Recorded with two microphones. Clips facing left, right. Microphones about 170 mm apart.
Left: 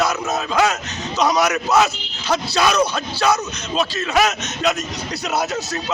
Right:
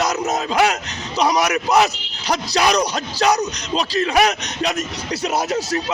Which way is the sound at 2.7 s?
40° right (ahead or behind).